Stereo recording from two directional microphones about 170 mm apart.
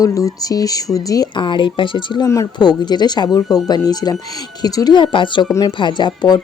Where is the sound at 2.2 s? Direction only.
20° left (ahead or behind).